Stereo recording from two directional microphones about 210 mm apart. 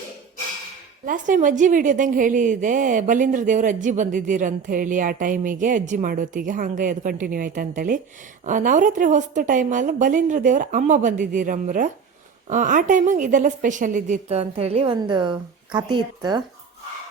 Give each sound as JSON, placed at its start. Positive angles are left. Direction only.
{"t": 1.0, "sound": "a woman's voice", "side_deg": -40}